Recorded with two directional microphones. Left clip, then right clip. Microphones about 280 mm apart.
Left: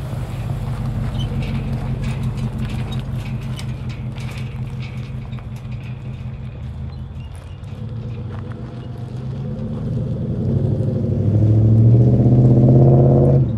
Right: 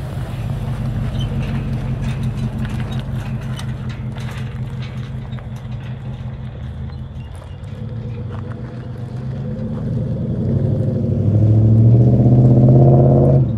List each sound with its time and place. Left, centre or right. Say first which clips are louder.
0.1 s vehicle: right 1 dB; centre
0.9 s vehicle: right 1 dB; left
1.2 s vehicle: right 1 dB; centre
9.3 s vehicle: right 2 dB; centre